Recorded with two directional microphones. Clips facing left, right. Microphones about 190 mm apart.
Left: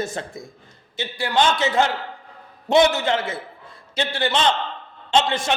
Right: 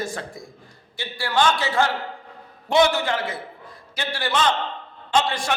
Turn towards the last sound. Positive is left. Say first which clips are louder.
# left 2 dB
turn(degrees=20)  # may be behind; listen again after turning